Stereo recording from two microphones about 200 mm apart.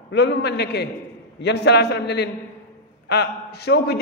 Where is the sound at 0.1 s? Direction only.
55° left (ahead or behind).